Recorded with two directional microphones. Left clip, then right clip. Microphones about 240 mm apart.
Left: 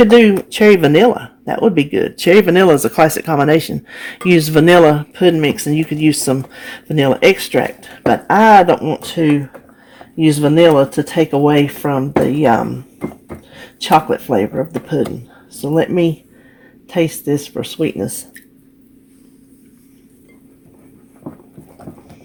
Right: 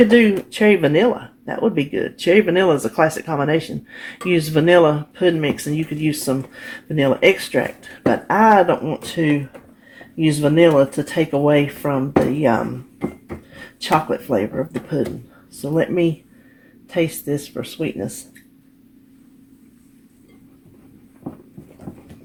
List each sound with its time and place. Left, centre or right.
0.1 s speech: left
13.8 s speech: left
15.6 s speech: left